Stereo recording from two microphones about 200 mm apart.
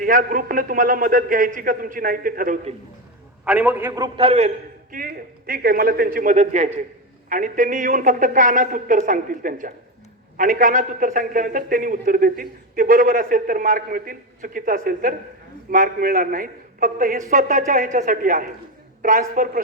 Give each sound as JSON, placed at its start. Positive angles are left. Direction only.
{"t": 0.0, "sound": "a man's voice", "side_deg": -45}
{"t": 3.4, "sound": "a man's voice", "side_deg": -10}
{"t": 4.9, "sound": "a man's voice", "side_deg": -45}